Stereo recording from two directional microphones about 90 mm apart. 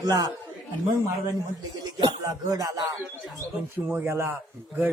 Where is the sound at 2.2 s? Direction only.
40° right (ahead or behind).